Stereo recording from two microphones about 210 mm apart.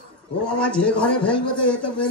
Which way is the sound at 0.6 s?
5° left (ahead or behind).